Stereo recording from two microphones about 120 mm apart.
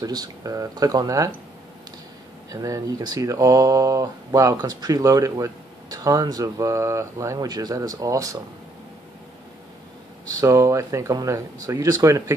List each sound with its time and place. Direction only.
0.0 s speech: 35° right (ahead or behind)
2.5 s speech: 30° right (ahead or behind)
10.4 s speech: 25° right (ahead or behind)